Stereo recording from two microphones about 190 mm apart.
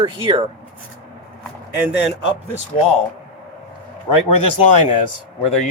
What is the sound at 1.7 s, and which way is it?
Speech, 5° right (ahead or behind).